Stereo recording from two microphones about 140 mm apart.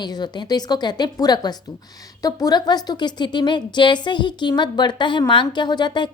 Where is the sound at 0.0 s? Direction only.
30° left (ahead or behind).